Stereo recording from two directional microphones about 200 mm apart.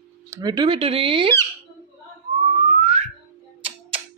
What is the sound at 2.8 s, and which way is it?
Whistling, 30° right (ahead or behind).